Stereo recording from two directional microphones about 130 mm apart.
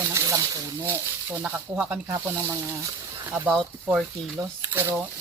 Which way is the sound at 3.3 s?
10° right (ahead or behind).